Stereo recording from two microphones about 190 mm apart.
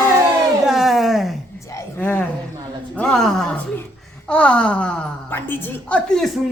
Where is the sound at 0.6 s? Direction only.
Centre (ahead or behind).